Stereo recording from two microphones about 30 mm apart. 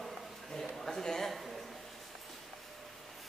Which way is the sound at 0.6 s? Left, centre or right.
Centre.